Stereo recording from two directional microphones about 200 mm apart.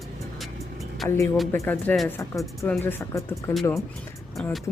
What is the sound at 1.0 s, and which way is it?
Speech, centre (ahead or behind).